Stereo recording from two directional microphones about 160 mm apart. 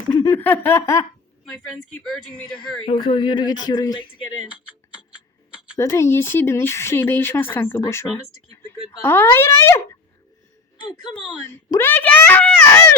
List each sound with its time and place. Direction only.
0.3 s speech: 15° left (ahead or behind)
1.5 s speech: 5° left (ahead or behind)
2.8 s speech: 35° left (ahead or behind)
4.4 s speech: 5° right (ahead or behind)
5.7 s speech: 15° left (ahead or behind)
11.0 s speech: 30° left (ahead or behind)
11.4 s speech: 15° left (ahead or behind)